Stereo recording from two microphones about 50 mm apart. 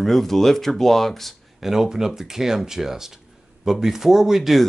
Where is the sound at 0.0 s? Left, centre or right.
Centre.